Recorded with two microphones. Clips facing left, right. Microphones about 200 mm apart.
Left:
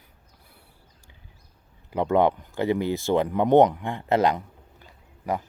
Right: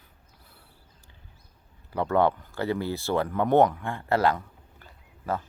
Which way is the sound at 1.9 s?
15° left (ahead or behind).